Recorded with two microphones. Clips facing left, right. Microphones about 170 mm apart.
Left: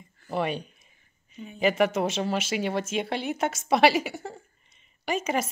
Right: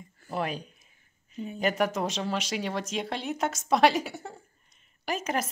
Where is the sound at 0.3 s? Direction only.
Centre (ahead or behind).